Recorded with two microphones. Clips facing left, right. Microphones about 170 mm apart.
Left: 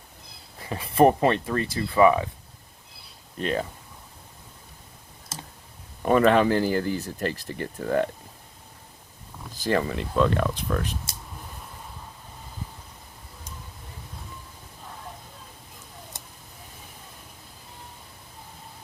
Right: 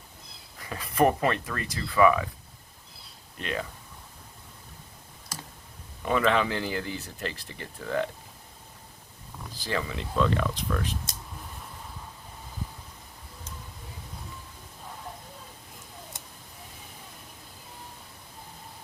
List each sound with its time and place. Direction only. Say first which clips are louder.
0.6 s speech: left 5 dB; 30° left (ahead or behind)
3.4 s speech: left 6 dB; 35° left (ahead or behind)
6.0 s speech: left 6 dB; 45° left (ahead or behind)
9.6 s speech: left 7 dB; 50° left (ahead or behind)